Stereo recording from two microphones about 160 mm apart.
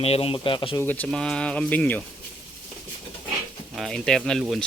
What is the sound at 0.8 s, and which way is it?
Speech, 10° left (ahead or behind).